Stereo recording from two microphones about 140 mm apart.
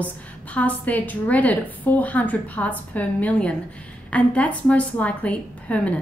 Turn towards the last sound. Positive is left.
turn(degrees=10)  # may be behind; listen again after turning